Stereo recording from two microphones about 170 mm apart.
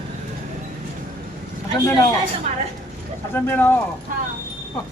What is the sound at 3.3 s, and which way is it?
Speech, 10° left (ahead or behind).